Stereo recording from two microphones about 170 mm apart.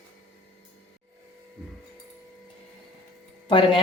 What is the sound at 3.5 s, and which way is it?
Speech, 30° left (ahead or behind).